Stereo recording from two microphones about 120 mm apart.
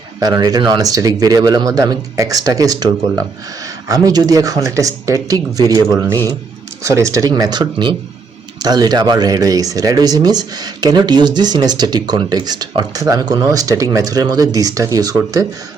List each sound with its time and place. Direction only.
0.2 s speech: 35° right (ahead or behind)
6.8 s speech: 25° right (ahead or behind)